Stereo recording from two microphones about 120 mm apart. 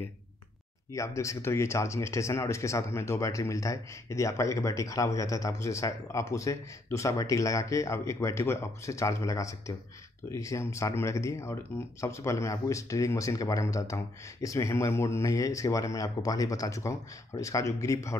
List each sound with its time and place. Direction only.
0.9 s speech: 25° left (ahead or behind)